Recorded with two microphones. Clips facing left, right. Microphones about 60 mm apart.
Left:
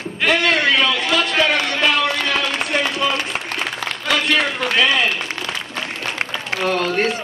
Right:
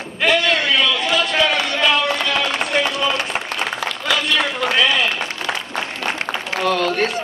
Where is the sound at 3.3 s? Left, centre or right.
Centre.